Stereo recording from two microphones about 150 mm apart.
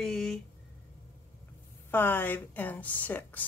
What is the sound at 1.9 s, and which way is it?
A woman's voice, 15° left (ahead or behind).